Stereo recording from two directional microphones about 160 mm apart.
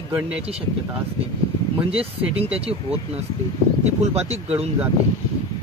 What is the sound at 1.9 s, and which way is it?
Speech, 40° right (ahead or behind).